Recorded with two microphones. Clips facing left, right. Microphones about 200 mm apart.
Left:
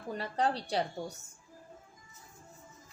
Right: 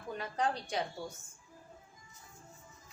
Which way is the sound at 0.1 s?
35° left (ahead or behind).